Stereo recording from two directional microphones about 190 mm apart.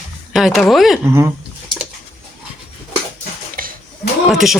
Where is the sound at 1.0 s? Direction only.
15° right (ahead or behind).